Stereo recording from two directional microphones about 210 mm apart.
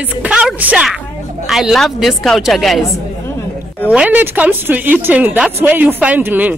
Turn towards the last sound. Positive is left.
turn(degrees=-10)  # may be behind; listen again after turning